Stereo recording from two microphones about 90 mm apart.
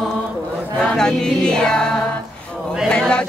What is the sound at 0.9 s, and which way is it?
Chant, 10° left (ahead or behind).